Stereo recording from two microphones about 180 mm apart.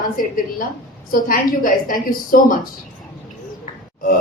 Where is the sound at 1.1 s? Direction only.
50° left (ahead or behind).